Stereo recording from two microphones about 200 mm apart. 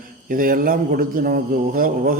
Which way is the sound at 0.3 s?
45° right (ahead or behind).